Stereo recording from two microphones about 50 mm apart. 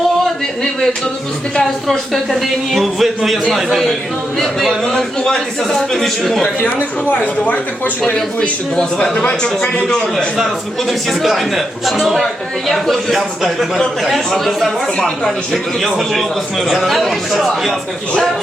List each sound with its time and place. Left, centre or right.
2.7 s a man's voice: centre
4.4 s a man's voice: centre
8.1 s a man's voice: centre
10.3 s a man's voice: centre